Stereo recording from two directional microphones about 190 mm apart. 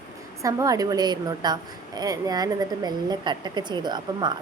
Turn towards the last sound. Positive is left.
turn(degrees=-25)  # may be behind; listen again after turning